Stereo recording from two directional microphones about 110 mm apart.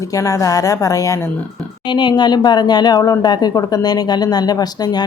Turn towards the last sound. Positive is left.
turn(degrees=40)  # may be behind; listen again after turning